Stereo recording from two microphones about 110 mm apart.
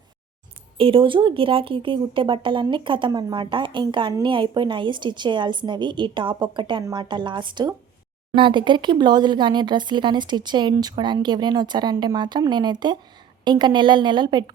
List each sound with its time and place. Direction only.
0.8 s speech: 55° right (ahead or behind)
3.1 s speech: 35° right (ahead or behind)
3.3 s speech: 50° right (ahead or behind)